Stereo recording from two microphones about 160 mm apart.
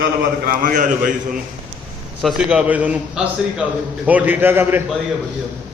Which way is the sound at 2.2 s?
5° right (ahead or behind).